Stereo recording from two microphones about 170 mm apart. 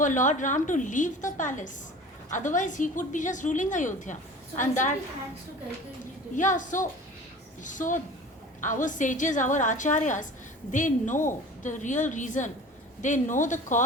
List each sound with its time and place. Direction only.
0.0 s a woman's voice: 50° left (ahead or behind)
6.3 s a woman's voice: 50° left (ahead or behind)